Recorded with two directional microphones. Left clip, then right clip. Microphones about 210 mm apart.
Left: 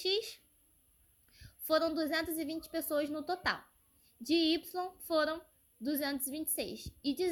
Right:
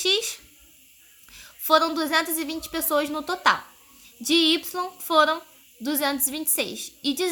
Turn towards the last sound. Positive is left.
turn(degrees=10)  # may be behind; listen again after turning